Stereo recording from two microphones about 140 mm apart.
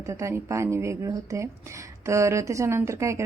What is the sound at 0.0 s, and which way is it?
A woman's voice, 20° right (ahead or behind).